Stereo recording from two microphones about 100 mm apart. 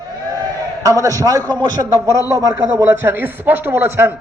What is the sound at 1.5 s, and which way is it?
A man's voice, 45° right (ahead or behind).